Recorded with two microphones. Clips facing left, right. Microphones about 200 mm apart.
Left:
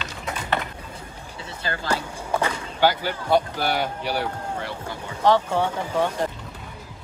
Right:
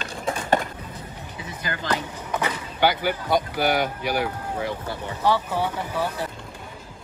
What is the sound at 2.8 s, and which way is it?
Speech, 10° right (ahead or behind).